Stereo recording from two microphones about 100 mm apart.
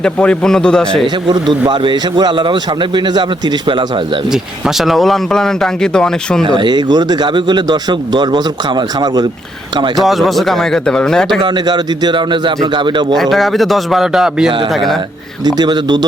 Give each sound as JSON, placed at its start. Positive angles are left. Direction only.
{"t": 0.0, "sound": "a man's voice", "side_deg": 10}
{"t": 1.3, "sound": "a man's voice", "side_deg": -50}
{"t": 4.3, "sound": "speech", "side_deg": -5}
{"t": 6.4, "sound": "a man's voice", "side_deg": -50}
{"t": 9.9, "sound": "speech", "side_deg": 0}
{"t": 11.4, "sound": "a man's voice", "side_deg": -45}
{"t": 13.1, "sound": "speech", "side_deg": 0}
{"t": 15.4, "sound": "a man's voice", "side_deg": -45}